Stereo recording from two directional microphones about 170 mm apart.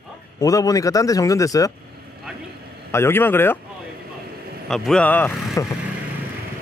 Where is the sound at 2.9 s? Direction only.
15° left (ahead or behind).